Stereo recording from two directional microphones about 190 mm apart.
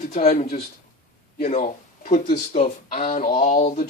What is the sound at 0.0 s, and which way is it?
Speech, 40° left (ahead or behind).